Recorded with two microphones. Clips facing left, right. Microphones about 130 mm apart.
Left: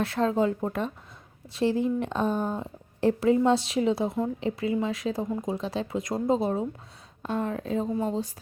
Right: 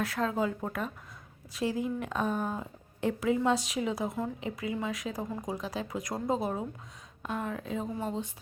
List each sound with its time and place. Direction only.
0.0 s a woman's voice: 30° left (ahead or behind)